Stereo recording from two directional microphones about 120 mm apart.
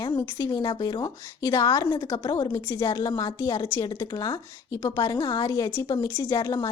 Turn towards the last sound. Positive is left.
turn(degrees=35)  # may be behind; listen again after turning